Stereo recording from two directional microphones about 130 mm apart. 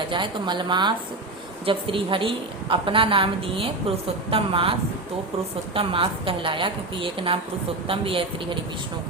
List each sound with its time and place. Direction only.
0.1 s a woman's voice: 35° right (ahead or behind)
5.7 s a woman's voice: 45° right (ahead or behind)